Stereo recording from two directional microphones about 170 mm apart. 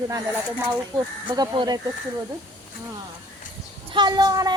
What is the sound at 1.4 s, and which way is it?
Speech, 25° right (ahead or behind).